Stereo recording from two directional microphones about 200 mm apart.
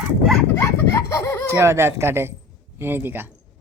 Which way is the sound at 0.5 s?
10° left (ahead or behind).